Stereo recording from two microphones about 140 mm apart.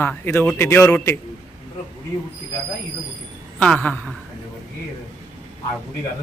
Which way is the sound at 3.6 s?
10° left (ahead or behind).